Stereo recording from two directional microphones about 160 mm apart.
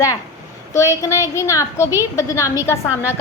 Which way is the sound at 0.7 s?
20° left (ahead or behind).